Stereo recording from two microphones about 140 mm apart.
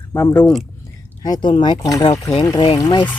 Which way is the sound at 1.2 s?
30° left (ahead or behind).